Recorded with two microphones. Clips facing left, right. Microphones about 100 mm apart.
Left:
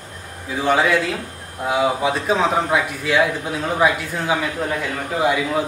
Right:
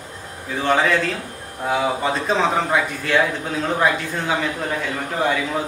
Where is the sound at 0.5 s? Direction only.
5° left (ahead or behind).